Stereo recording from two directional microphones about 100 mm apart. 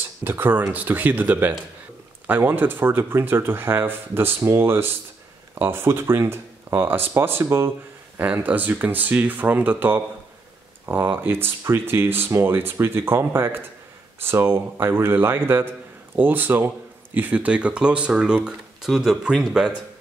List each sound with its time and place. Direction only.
0.2 s speech: 20° right (ahead or behind); by 19.7 s 5° right (ahead or behind)